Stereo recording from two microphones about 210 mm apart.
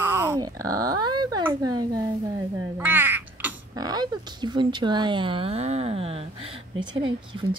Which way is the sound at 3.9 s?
20° right (ahead or behind).